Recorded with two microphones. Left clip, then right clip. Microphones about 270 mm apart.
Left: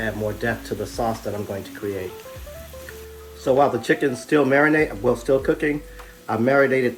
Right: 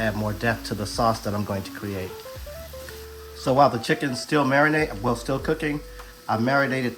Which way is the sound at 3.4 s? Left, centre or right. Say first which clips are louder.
Left 1 dB; centre.